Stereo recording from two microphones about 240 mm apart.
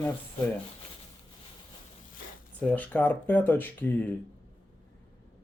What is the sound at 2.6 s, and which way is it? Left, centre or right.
Speech, centre.